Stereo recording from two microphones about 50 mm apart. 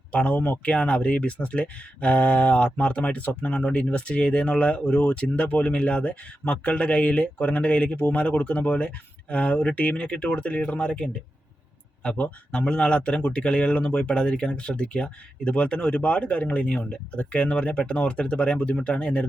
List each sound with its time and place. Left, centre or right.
0.1 s speech: left
0.3 s speech: left
0.6 s speech: left